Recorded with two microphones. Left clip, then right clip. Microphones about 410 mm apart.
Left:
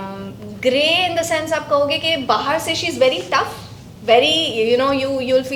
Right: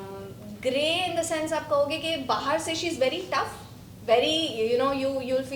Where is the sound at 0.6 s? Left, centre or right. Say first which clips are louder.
Left 10 dB; left.